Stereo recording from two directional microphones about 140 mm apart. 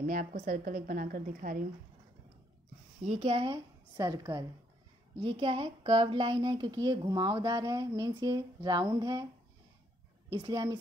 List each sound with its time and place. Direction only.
0.0 s a woman's voice: 75° right (ahead or behind)
3.1 s a woman's voice: 45° right (ahead or behind); by 4.5 s 30° right (ahead or behind)
5.2 s a woman's voice: 40° right (ahead or behind)
10.3 s a woman's voice: 30° right (ahead or behind)